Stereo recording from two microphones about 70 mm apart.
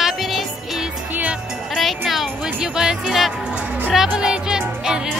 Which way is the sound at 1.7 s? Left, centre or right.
Centre.